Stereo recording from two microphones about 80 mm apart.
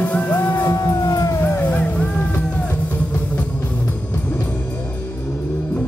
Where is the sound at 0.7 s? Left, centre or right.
Left.